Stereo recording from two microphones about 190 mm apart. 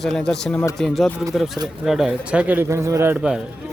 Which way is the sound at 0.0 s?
Centre (ahead or behind).